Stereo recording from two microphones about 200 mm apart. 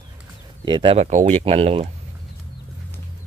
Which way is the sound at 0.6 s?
25° right (ahead or behind).